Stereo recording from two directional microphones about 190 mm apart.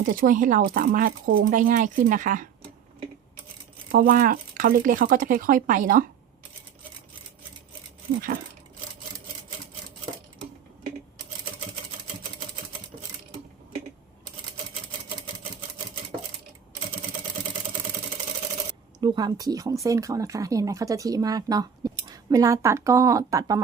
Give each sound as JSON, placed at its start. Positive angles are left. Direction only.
{"t": 0.0, "sound": "speech", "side_deg": -45}
{"t": 3.9, "sound": "speech", "side_deg": -50}
{"t": 18.9, "sound": "speech", "side_deg": -25}